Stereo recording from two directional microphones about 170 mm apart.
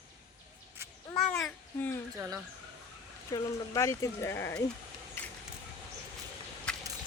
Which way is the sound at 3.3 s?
20° left (ahead or behind).